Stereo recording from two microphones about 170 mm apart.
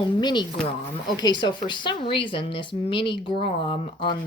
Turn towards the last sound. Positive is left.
turn(degrees=30)  # may be behind; listen again after turning